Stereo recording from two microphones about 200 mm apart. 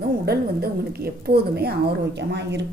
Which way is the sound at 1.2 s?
50° right (ahead or behind).